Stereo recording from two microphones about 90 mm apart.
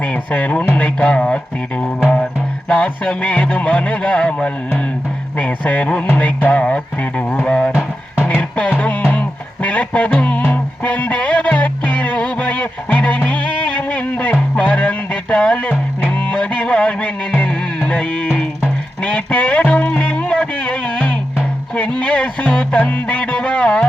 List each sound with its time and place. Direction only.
0.0 s speech: 15° left (ahead or behind)
8.2 s music: 15° left (ahead or behind)